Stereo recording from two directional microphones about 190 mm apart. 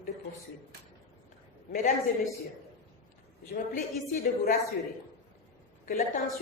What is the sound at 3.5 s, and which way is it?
A man's voice, 45° left (ahead or behind).